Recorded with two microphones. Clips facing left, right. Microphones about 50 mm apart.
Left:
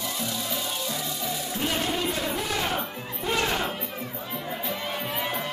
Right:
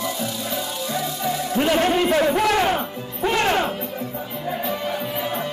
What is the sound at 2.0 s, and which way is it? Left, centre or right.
Speech, right.